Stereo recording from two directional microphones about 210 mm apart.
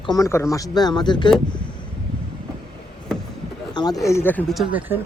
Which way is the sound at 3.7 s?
20° left (ahead or behind).